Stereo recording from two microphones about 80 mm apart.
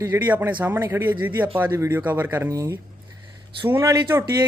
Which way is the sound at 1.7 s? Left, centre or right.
Right.